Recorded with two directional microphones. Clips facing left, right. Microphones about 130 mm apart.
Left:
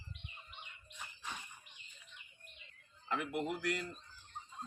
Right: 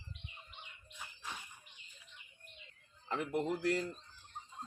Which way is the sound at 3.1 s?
35° right (ahead or behind).